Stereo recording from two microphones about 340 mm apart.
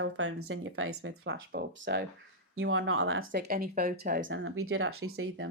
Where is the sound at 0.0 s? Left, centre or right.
Right.